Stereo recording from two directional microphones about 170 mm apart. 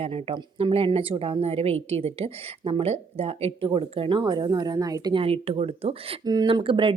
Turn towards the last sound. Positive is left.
turn(degrees=-30)  # may be behind; listen again after turning